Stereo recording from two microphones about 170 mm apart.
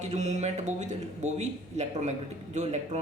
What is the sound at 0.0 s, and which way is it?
A man's voice, 40° right (ahead or behind).